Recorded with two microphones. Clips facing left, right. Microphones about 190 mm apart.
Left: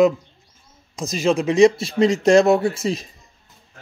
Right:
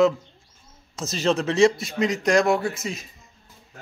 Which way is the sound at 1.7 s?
30° left (ahead or behind).